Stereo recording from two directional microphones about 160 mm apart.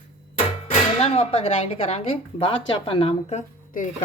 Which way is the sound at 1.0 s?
40° left (ahead or behind).